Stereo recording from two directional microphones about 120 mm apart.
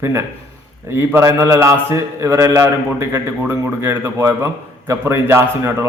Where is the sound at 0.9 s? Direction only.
20° right (ahead or behind).